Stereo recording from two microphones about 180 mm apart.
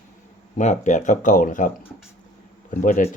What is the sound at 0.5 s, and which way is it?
Speech, 40° left (ahead or behind).